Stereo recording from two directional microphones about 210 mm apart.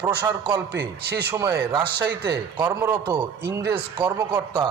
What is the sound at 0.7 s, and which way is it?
Speech, 50° right (ahead or behind).